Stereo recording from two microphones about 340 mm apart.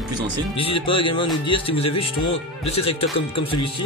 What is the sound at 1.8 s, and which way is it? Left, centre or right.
Speech, left.